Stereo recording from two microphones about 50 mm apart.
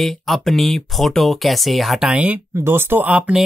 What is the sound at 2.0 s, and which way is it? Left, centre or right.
Speech, centre.